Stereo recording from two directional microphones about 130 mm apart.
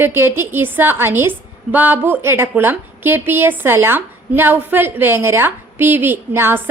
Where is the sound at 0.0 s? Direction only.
15° right (ahead or behind).